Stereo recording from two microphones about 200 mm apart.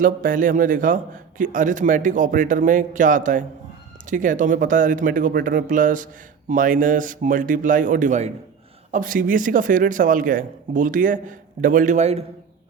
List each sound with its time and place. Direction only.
0.0 s a man's voice: 45° right (ahead or behind)